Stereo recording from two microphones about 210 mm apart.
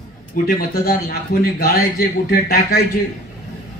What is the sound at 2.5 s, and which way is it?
Speech, 45° left (ahead or behind).